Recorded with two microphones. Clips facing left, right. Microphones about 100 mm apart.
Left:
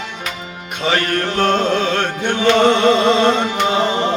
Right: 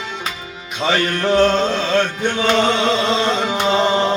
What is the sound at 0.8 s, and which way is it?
Music, 50° left (ahead or behind).